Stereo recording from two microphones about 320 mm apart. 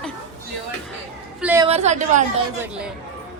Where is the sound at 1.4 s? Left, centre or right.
Centre.